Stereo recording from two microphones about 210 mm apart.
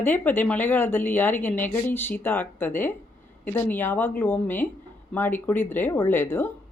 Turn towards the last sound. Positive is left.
turn(degrees=10)  # may be behind; listen again after turning